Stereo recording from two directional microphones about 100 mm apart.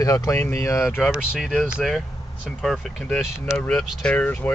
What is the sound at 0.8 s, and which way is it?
Speech, 5° right (ahead or behind).